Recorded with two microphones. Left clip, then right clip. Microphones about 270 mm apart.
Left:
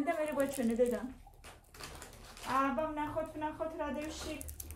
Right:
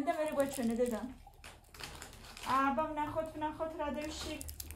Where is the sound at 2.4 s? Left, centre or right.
Right.